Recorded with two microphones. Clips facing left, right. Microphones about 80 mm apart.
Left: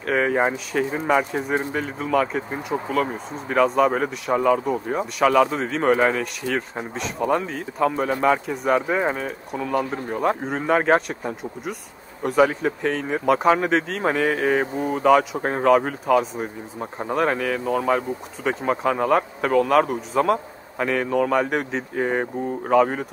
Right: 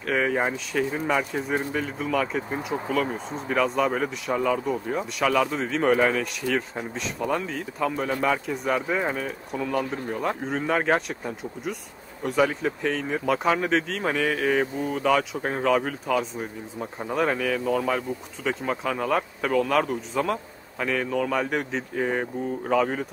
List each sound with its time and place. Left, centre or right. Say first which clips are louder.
0.0 s a man's voice: left 4 dB; centre
2.0 s a man's voice: left 5 dB; centre
9.5 s a man's voice: left 2 dB; centre
9.8 s a man's voice: left 6 dB; left
12.4 s a man's voice: left 4 dB; centre
14.0 s a man's voice: left 3 dB; centre